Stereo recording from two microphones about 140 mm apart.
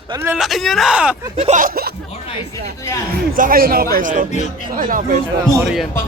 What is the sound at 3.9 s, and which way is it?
Speech, 70° right (ahead or behind).